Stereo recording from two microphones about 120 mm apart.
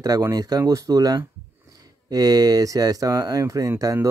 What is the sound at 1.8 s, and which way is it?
Speech, 30° right (ahead or behind).